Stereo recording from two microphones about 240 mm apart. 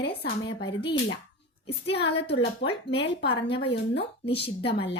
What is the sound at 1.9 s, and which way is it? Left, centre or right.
A woman's voice, left.